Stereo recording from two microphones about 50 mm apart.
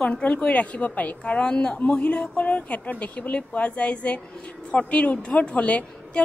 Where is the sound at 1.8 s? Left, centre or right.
Left.